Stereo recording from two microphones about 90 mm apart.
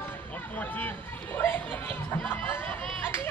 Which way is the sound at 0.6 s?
20° left (ahead or behind).